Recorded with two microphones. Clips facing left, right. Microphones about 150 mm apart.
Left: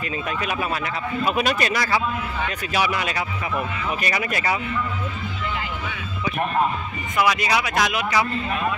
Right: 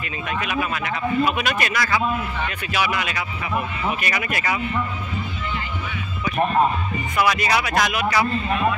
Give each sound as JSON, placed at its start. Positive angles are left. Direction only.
{"t": 0.3, "sound": "speech", "side_deg": 35}
{"t": 7.2, "sound": "speech", "side_deg": 20}